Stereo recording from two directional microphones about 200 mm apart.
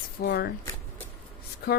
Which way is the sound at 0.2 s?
55° left (ahead or behind).